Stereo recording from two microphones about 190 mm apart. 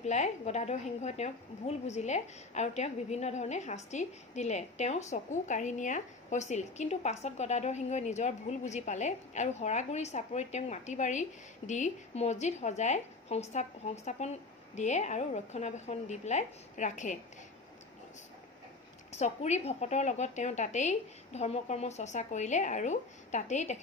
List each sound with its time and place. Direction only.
0.0 s a woman's voice: 35° left (ahead or behind)
19.1 s a woman's voice: 35° left (ahead or behind)